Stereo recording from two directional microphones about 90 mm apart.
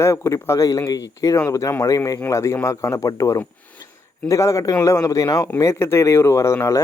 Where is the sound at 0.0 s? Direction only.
30° left (ahead or behind).